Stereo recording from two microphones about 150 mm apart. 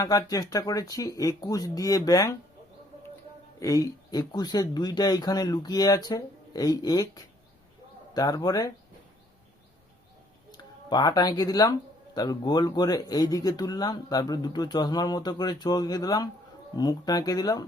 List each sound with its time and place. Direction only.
0.0 s speech: 20° left (ahead or behind)
3.6 s speech: 20° left (ahead or behind)
10.8 s speech: 25° left (ahead or behind)